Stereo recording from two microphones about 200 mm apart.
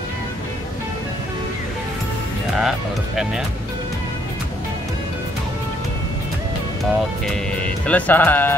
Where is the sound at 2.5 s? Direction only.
Centre (ahead or behind).